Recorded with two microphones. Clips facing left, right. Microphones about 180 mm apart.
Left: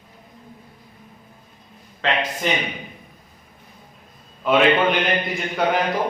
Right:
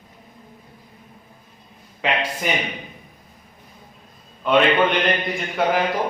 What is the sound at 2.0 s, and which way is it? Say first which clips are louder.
Speech: left 1 dB; 10° right (ahead or behind).